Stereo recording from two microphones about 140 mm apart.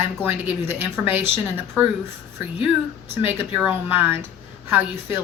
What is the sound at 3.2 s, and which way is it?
A woman's voice, 10° right (ahead or behind).